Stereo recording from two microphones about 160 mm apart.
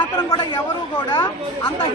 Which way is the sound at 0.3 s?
30° left (ahead or behind).